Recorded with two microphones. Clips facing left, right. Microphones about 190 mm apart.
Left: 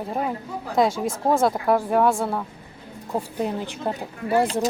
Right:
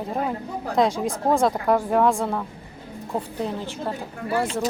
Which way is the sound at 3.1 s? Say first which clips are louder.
Left 2 dB; 15° left (ahead or behind).